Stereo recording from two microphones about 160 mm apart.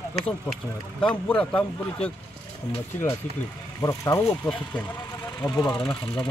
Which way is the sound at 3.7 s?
20° left (ahead or behind).